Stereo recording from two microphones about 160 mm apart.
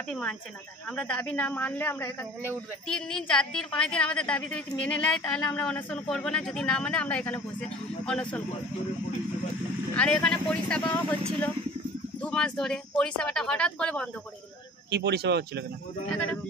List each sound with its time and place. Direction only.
0.1 s a woman's voice: 5° left (ahead or behind)
9.9 s speech: 5° left (ahead or behind)
12.2 s speech: 5° left (ahead or behind)
14.9 s speech: 90° right